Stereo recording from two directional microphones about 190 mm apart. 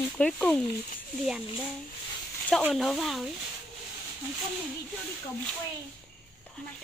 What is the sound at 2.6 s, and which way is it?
Speech, centre (ahead or behind).